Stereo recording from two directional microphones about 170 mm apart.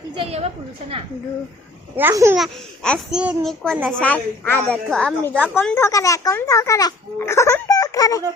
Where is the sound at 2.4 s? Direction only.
5° left (ahead or behind).